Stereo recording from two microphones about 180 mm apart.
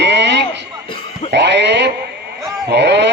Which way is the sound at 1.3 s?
75° right (ahead or behind).